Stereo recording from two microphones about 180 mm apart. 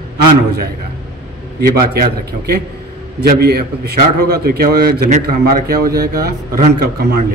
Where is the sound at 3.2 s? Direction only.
60° right (ahead or behind).